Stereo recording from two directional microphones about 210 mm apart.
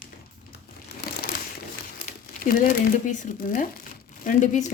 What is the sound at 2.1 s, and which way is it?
Speech, 40° left (ahead or behind).